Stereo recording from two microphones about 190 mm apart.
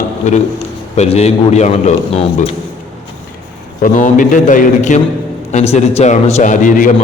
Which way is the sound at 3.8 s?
45° left (ahead or behind).